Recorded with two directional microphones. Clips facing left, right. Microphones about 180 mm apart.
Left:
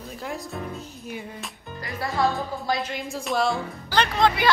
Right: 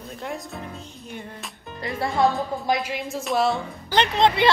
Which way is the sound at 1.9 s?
25° right (ahead or behind).